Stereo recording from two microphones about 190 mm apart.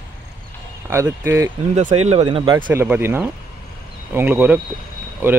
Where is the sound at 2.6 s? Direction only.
10° right (ahead or behind).